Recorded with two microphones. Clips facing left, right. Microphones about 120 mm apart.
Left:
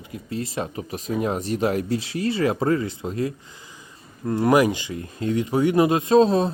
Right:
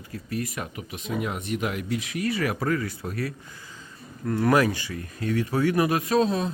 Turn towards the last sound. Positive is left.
turn(degrees=35)  # may be behind; listen again after turning